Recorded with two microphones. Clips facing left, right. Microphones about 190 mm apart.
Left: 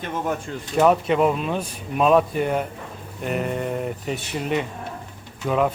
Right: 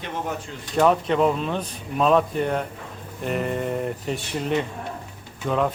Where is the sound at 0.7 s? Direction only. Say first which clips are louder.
Left 1 dB; 10° left (ahead or behind).